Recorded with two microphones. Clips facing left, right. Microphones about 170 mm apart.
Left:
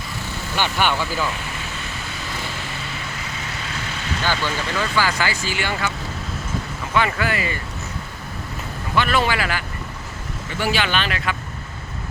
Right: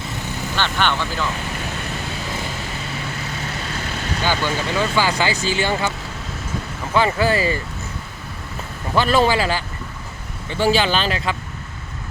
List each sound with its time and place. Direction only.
0.5 s speech: 10° left (ahead or behind)
4.2 s speech: 15° right (ahead or behind)
6.9 s speech: 30° right (ahead or behind)
9.0 s speech: 30° right (ahead or behind)